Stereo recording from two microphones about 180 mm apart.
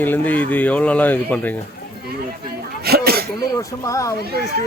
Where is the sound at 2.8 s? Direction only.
60° right (ahead or behind).